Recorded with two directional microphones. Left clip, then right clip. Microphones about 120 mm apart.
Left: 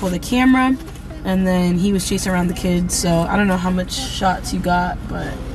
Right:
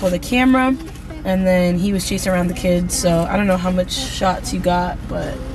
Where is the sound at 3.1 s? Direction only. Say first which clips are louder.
Right 1 dB; 15° left (ahead or behind).